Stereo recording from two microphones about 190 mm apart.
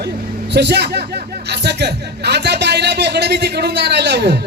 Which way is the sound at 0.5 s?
60° right (ahead or behind).